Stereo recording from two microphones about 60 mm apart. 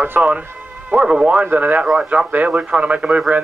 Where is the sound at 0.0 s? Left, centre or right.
Right.